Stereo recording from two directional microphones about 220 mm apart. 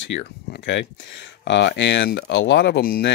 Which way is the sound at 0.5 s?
55° left (ahead or behind).